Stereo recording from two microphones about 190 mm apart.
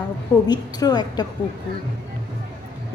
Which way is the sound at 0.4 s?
20° left (ahead or behind).